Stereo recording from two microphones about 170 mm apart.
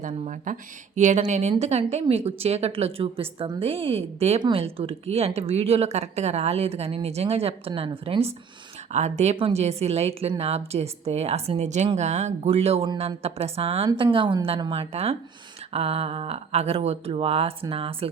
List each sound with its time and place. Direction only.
0.0 s speech: 50° right (ahead or behind); by 18.1 s 35° right (ahead or behind)